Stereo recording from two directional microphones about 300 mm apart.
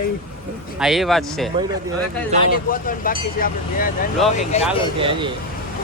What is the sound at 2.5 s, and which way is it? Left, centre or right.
A man's voice, left.